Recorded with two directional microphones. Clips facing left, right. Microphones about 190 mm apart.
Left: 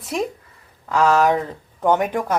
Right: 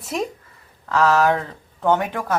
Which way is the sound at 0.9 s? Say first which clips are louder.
Left 1 dB; 10° left (ahead or behind).